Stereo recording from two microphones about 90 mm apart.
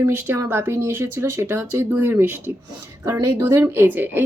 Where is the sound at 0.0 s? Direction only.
25° right (ahead or behind).